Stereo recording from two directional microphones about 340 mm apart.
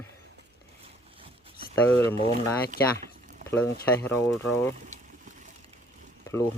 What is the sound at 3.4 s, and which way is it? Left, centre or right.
Speech, centre.